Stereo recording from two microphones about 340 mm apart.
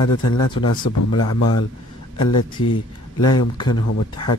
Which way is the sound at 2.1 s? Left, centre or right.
Left.